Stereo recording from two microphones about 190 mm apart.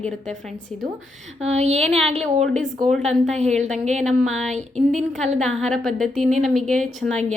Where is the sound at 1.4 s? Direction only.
35° right (ahead or behind).